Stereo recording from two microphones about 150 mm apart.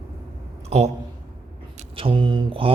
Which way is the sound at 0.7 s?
45° right (ahead or behind).